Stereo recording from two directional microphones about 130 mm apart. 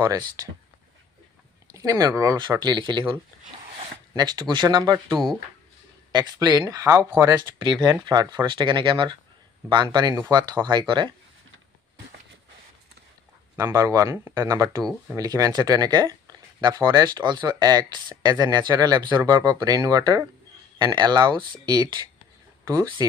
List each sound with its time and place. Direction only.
1.7 s speech: 25° right (ahead or behind)
4.2 s speech: 35° right (ahead or behind)
6.1 s speech: 30° right (ahead or behind)
13.6 s speech: 25° right (ahead or behind)